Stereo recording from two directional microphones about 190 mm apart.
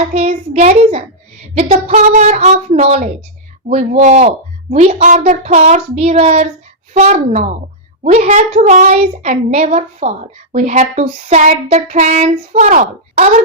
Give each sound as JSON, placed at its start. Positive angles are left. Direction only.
{"t": 0.1, "sound": "child singing", "side_deg": -30}